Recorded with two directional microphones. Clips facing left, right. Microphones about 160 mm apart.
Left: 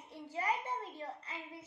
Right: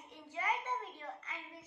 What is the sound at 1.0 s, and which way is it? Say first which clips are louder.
Child singing: left 3 dB; 30° left (ahead or behind).